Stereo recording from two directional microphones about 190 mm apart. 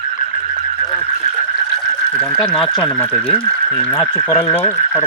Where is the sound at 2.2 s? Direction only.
Centre (ahead or behind).